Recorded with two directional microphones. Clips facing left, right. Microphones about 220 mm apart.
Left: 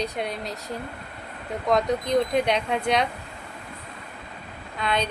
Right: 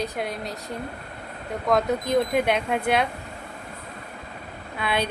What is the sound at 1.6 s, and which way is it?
Speech, 5° right (ahead or behind).